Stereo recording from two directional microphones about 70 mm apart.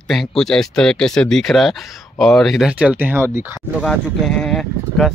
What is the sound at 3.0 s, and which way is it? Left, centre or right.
Speech, right.